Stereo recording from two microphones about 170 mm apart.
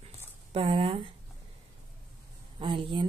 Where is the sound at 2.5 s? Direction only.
30° right (ahead or behind).